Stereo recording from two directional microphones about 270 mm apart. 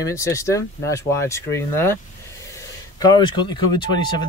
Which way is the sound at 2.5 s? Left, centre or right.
Centre.